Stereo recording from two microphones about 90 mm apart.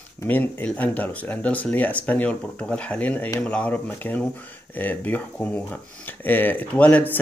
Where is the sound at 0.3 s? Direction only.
20° left (ahead or behind).